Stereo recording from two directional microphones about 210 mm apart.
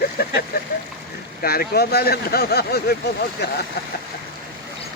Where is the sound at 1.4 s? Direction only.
45° left (ahead or behind).